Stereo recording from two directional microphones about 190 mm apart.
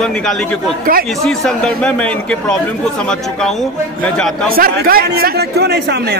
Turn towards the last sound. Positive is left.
turn(degrees=-60)  # may be behind; listen again after turning